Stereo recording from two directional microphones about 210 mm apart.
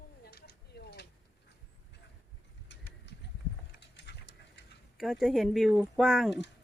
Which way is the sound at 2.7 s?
55° left (ahead or behind).